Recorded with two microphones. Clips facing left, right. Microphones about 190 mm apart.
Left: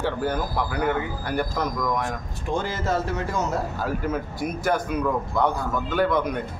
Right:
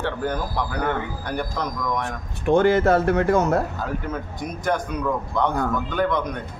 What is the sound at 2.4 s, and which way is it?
Speech, 60° right (ahead or behind).